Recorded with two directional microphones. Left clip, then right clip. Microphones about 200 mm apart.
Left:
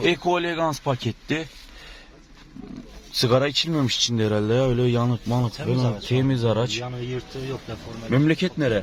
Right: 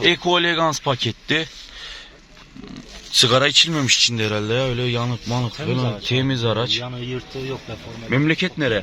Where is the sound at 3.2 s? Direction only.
5° left (ahead or behind); by 5.2 s 25° left (ahead or behind).